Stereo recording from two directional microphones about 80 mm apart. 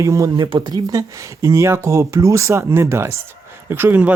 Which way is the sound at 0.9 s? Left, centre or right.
Right.